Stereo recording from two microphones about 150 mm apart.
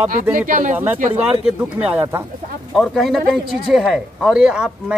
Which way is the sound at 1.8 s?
10° right (ahead or behind).